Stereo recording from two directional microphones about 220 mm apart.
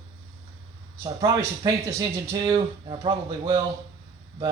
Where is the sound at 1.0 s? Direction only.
15° right (ahead or behind).